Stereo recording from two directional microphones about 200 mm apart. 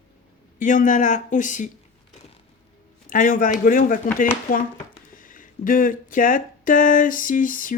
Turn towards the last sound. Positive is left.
turn(degrees=40)  # may be behind; listen again after turning